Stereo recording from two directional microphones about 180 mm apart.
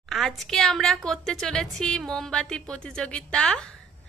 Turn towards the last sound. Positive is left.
turn(degrees=5)  # may be behind; listen again after turning